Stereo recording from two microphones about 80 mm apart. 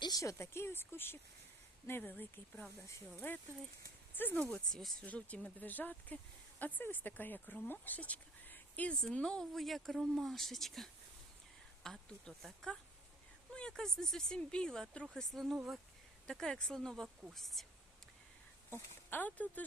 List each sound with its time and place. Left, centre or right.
0.2 s speech: left
4.5 s speech: centre
16.3 s speech: centre
19.1 s speech: left